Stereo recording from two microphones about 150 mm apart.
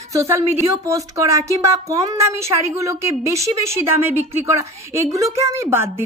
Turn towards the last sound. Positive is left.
turn(degrees=-15)  # may be behind; listen again after turning